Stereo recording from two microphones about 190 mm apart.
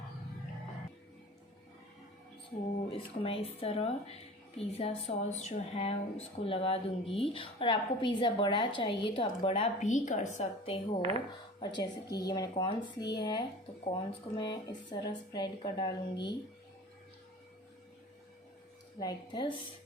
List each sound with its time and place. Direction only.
2.9 s a woman's voice: 30° left (ahead or behind)
11.6 s a woman's voice: 20° left (ahead or behind)
18.9 s a woman's voice: 20° left (ahead or behind)